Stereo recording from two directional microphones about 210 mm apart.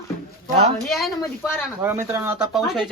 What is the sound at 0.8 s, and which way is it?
Speech, centre (ahead or behind).